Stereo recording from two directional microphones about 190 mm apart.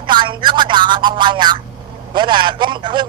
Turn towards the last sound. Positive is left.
turn(degrees=-25)  # may be behind; listen again after turning